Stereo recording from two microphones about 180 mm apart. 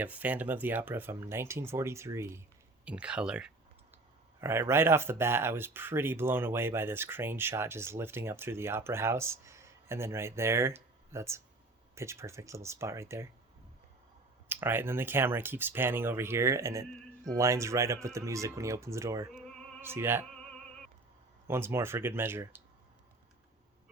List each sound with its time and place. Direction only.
0.0 s speech: 10° right (ahead or behind)
14.4 s speech: 10° right (ahead or behind)
21.4 s speech: 15° right (ahead or behind)